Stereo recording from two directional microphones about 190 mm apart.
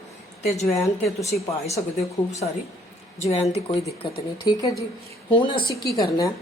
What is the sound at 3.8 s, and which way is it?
Speech, 20° left (ahead or behind).